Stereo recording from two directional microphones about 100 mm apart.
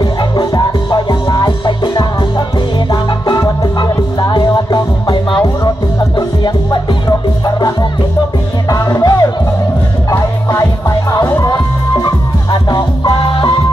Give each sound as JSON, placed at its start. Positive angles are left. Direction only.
{"t": 0.0, "sound": "music", "side_deg": 50}
{"t": 12.0, "sound": "music", "side_deg": 45}